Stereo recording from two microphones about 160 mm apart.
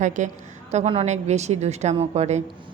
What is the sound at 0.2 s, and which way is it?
A woman's voice, 50° right (ahead or behind).